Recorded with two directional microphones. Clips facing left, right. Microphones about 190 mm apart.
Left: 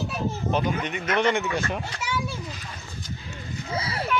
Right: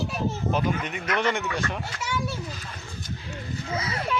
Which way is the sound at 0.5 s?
5° right (ahead or behind).